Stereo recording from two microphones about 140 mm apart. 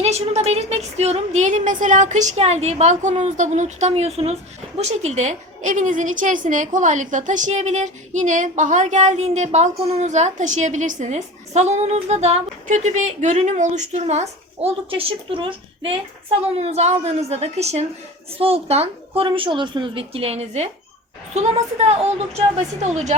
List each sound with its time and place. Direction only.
0.0 s a woman's voice: 50° right (ahead or behind)